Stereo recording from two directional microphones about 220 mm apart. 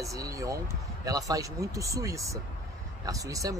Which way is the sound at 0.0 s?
15° right (ahead or behind).